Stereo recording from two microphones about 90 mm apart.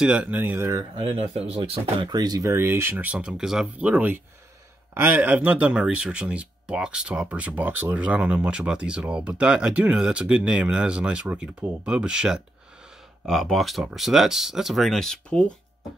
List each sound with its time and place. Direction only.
0.0 s speech: 15° right (ahead or behind)
0.9 s speech: 90° right
2.0 s speech: 50° right (ahead or behind)
2.5 s speech: 25° right (ahead or behind); by 12.4 s 10° right (ahead or behind)
13.2 s speech: centre (ahead or behind)